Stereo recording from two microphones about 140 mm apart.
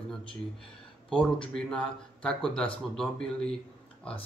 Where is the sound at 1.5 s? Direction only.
5° left (ahead or behind).